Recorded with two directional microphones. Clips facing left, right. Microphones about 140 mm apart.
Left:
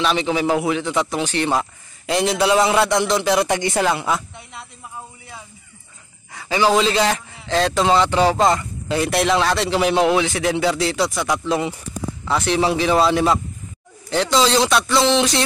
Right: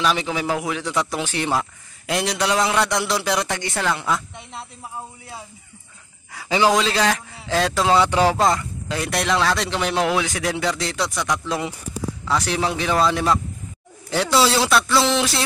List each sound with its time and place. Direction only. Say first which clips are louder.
0.2 s speech: left 5 dB; centre (ahead or behind)
3.4 s speech: left 5 dB; 15° left (ahead or behind)
6.3 s a sound: even; 15° right (ahead or behind)
6.7 s speech: left 2 dB; 5° left (ahead or behind)
8.4 s speech: left 2 dB; centre (ahead or behind)
14.1 s speech: left 2 dB; 10° right (ahead or behind)